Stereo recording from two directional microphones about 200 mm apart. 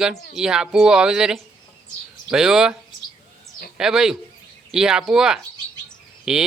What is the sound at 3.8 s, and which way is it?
Bird, 5° right (ahead or behind).